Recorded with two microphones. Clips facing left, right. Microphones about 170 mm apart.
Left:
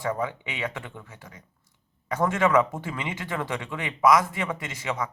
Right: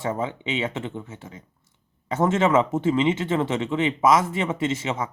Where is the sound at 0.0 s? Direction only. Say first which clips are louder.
Right 2 dB; 25° right (ahead or behind).